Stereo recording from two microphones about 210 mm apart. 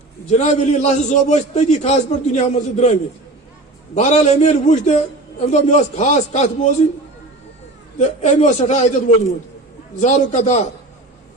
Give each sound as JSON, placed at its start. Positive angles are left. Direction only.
{"t": 0.3, "sound": "a man's voice", "side_deg": 35}
{"t": 3.9, "sound": "a man's voice", "side_deg": 35}
{"t": 7.9, "sound": "a man's voice", "side_deg": 35}